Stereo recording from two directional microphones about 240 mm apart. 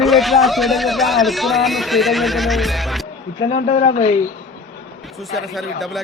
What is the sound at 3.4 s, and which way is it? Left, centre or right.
Speech, left.